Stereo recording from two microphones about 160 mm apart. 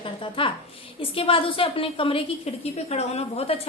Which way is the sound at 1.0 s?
35° left (ahead or behind).